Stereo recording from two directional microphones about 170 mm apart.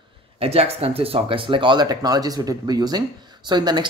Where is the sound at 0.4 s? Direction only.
35° right (ahead or behind).